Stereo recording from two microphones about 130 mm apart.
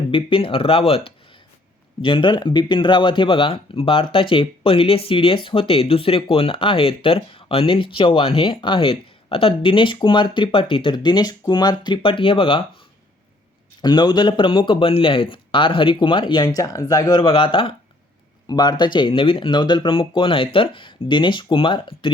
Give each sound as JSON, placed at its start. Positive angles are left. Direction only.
{"t": 0.1, "sound": "speech", "side_deg": 45}
{"t": 13.8, "sound": "speech", "side_deg": 35}